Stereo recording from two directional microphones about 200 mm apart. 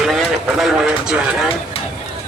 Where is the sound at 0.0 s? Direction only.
Centre (ahead or behind).